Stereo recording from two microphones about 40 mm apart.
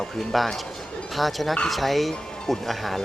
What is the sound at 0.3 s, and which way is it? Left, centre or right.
Speech, centre.